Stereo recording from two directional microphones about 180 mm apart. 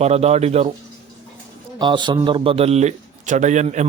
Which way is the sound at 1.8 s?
25° right (ahead or behind).